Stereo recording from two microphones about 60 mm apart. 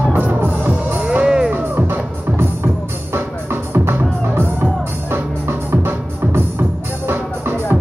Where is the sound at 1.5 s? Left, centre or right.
Right.